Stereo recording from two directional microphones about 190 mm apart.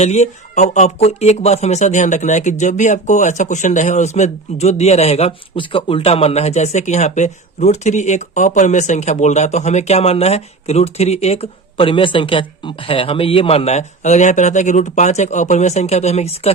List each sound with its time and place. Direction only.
0.0 s speech: 35° left (ahead or behind)